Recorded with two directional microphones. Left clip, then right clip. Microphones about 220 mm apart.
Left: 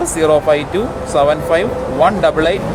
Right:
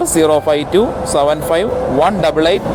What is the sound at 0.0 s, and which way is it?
A man's voice, 30° right (ahead or behind).